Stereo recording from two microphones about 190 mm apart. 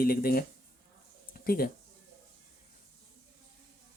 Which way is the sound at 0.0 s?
50° left (ahead or behind).